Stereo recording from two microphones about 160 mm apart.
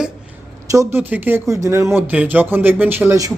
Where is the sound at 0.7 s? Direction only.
15° right (ahead or behind).